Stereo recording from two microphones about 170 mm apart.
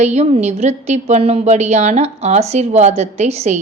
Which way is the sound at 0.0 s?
40° right (ahead or behind).